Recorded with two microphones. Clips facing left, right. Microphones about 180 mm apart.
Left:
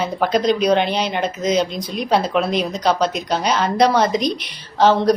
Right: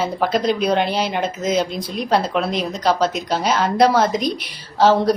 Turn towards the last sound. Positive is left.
turn(degrees=-5)  # may be behind; listen again after turning